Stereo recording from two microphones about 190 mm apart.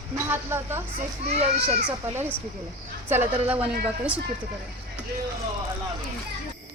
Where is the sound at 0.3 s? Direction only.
10° right (ahead or behind).